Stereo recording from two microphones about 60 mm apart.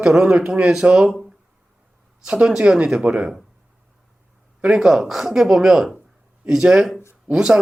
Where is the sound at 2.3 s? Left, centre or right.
Centre.